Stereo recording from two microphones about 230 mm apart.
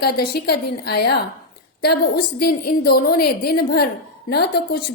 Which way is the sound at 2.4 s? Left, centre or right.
Left.